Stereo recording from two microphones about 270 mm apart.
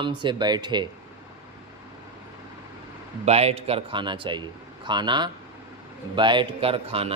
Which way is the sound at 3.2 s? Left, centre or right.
Right.